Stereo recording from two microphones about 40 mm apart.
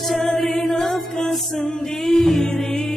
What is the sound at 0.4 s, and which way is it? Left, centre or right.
Music, centre.